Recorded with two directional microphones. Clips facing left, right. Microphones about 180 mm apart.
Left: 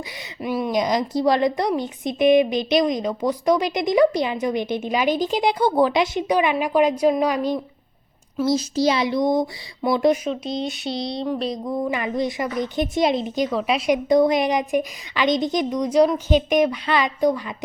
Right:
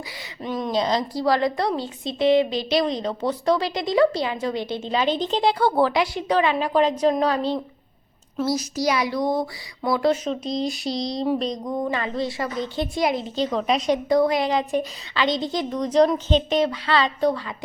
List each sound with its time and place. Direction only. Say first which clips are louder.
0.4 s a woman's voice: left 2 dB; 10° left (ahead or behind)
8.4 s speech: left 4 dB; 25° left (ahead or behind)
10.2 s a woman's voice: even; centre (ahead or behind)